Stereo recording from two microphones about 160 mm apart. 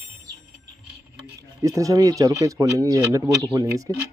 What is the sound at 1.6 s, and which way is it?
Speech, 20° right (ahead or behind).